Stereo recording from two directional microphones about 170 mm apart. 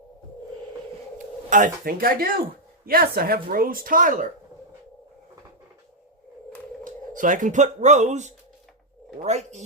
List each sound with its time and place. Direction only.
1.5 s a woman's voice: 50° right (ahead or behind)
6.8 s speech: 50° right (ahead or behind)